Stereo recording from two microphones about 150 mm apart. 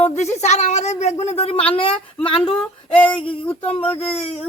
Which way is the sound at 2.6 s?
10° left (ahead or behind).